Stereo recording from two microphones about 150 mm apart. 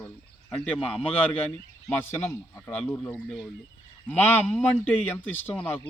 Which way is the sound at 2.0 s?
15° left (ahead or behind).